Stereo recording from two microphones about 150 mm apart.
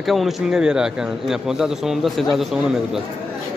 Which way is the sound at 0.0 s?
Centre (ahead or behind).